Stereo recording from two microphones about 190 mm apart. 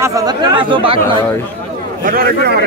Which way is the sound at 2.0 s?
45° right (ahead or behind).